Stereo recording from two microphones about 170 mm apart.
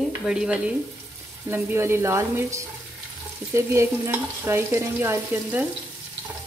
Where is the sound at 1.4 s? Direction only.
15° right (ahead or behind).